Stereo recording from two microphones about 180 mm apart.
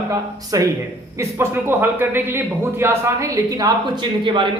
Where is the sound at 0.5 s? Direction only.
20° right (ahead or behind).